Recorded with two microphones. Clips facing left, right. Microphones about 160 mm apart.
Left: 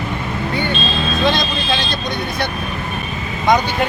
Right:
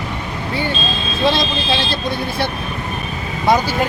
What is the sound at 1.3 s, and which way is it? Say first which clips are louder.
Speech: right 1 dB; 30° right (ahead or behind).